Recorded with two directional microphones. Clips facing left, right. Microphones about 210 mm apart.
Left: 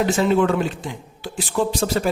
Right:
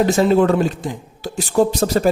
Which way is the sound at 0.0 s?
40° right (ahead or behind).